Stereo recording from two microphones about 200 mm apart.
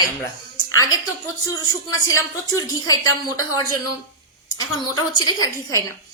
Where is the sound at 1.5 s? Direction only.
15° left (ahead or behind).